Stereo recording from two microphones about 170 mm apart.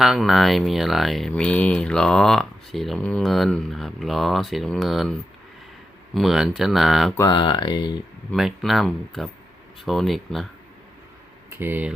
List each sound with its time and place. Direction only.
0.0 s speech: centre (ahead or behind)
6.1 s speech: centre (ahead or behind)
7.2 s speech: 25° left (ahead or behind)
8.3 s speech: centre (ahead or behind)
11.5 s speech: 10° right (ahead or behind)